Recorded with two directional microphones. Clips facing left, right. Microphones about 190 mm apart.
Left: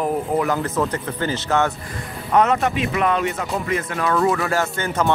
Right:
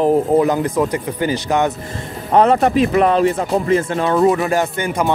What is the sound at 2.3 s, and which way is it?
Speech, 35° right (ahead or behind).